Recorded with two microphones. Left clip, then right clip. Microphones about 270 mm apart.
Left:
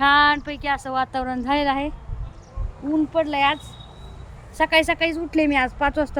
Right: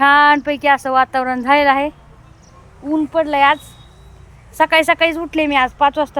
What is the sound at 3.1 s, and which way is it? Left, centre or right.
Speech, centre.